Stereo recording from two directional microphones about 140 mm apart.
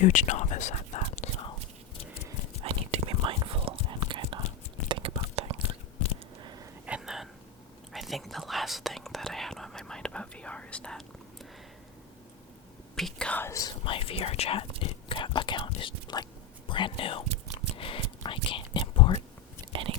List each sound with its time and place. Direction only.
0.0 s whispering: 65° left (ahead or behind)
2.6 s whispering: 40° right (ahead or behind)
6.4 s a sound: 30° right (ahead or behind)
6.8 s a sound: 5° right (ahead or behind)
7.9 s whispering: centre (ahead or behind)
13.0 s whispering: 5° left (ahead or behind); by 13.7 s 25° left (ahead or behind)
13.8 s whispering: 40° left (ahead or behind)
19.7 s chewing: 40° right (ahead or behind)